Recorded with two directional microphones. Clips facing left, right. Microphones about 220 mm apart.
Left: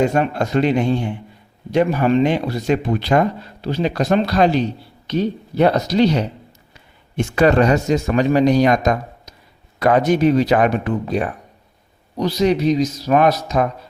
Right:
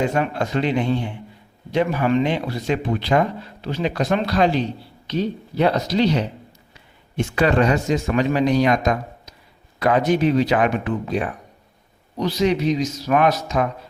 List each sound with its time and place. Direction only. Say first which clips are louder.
0.1 s speech: left 3 dB; 45° left (ahead or behind)
2.0 s speech: left 4 dB; 35° left (ahead or behind)
7.3 s speech: left 4 dB; 45° left (ahead or behind)